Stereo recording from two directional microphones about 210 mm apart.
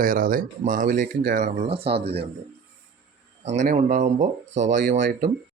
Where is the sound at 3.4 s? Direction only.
35° right (ahead or behind).